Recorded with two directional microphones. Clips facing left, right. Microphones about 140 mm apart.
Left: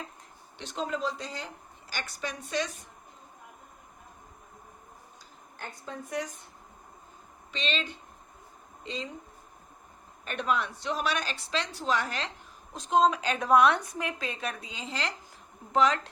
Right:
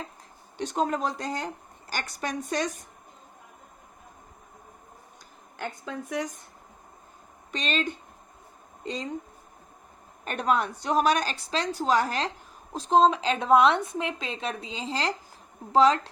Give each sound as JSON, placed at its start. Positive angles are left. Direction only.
{"t": 0.5, "sound": "speech", "side_deg": -45}
{"t": 5.5, "sound": "a woman's voice", "side_deg": -90}
{"t": 7.5, "sound": "speech", "side_deg": -45}
{"t": 10.2, "sound": "a woman's voice", "side_deg": -40}